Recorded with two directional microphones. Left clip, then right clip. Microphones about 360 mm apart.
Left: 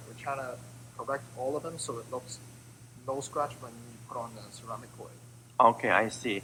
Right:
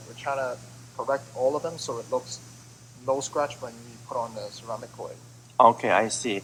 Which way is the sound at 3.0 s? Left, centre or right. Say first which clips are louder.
Right 7 dB; centre.